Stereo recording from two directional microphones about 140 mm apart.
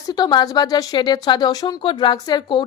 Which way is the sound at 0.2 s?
30° left (ahead or behind).